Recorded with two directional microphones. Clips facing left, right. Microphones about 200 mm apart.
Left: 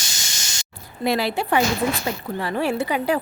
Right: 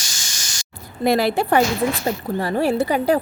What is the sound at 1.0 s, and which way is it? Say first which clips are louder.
A woman's voice: right 4 dB; 45° right (ahead or behind).